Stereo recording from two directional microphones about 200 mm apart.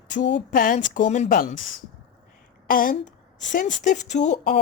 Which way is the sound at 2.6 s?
45° left (ahead or behind).